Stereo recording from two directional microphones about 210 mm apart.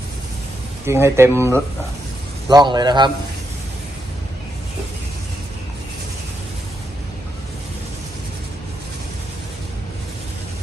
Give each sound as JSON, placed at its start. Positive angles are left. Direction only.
{"t": 0.9, "sound": "a man's voice", "side_deg": -10}